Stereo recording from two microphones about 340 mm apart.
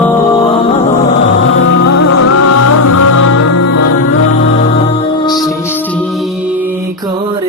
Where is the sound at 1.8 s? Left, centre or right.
Left.